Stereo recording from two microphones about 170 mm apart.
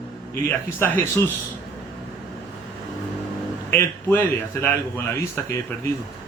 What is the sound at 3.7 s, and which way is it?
A man's voice, 15° left (ahead or behind).